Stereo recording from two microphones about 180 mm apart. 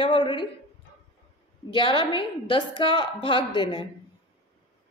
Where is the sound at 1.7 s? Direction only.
25° left (ahead or behind).